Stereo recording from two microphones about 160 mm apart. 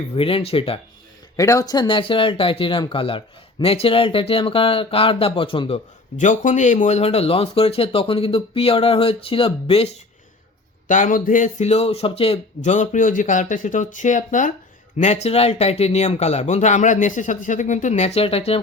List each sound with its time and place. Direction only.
0.2 s speech: 35° left (ahead or behind)
1.4 s speech: 20° left (ahead or behind); by 5.8 s 35° left (ahead or behind)
6.1 s speech: 50° left (ahead or behind)
10.8 s speech: 55° left (ahead or behind); by 18.6 s 35° left (ahead or behind)